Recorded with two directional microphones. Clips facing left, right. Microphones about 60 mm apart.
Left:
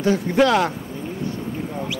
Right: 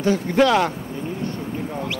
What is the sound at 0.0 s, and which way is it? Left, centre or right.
Speech, centre.